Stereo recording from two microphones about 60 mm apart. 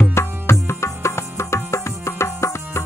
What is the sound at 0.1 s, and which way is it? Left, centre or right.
Music, left.